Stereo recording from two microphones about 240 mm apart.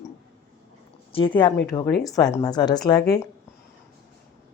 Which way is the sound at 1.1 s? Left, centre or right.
Left.